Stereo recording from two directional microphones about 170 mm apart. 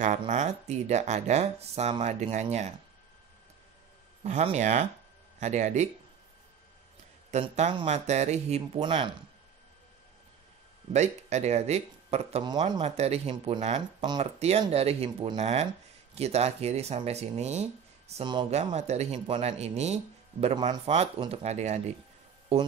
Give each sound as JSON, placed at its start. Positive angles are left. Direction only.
{"t": 0.0, "sound": "speech", "side_deg": -45}
{"t": 4.2, "sound": "speech", "side_deg": -40}
{"t": 7.5, "sound": "speech", "side_deg": -40}
{"t": 8.7, "sound": "speech", "side_deg": -30}
{"t": 10.9, "sound": "speech", "side_deg": -40}
{"t": 12.4, "sound": "speech", "side_deg": -25}
{"t": 12.8, "sound": "speech", "side_deg": -40}
{"t": 15.3, "sound": "speech", "side_deg": -40}
{"t": 18.2, "sound": "speech", "side_deg": -25}
{"t": 18.5, "sound": "speech", "side_deg": -40}